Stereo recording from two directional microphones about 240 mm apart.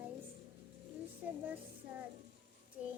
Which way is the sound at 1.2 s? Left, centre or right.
Centre.